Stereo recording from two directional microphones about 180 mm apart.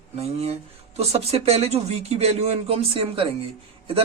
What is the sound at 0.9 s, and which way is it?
A man's voice, 35° right (ahead or behind).